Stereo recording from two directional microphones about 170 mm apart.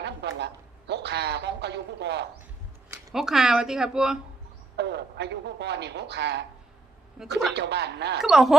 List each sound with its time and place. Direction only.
0.0 s a man's voice: 90° right
3.1 s speech: centre (ahead or behind)
4.8 s speech: 85° right
7.2 s speech: 5° right (ahead or behind)
7.5 s speech: 85° right
8.2 s speech: centre (ahead or behind)